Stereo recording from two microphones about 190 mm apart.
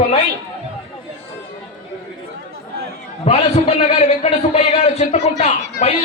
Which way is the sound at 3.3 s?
30° left (ahead or behind).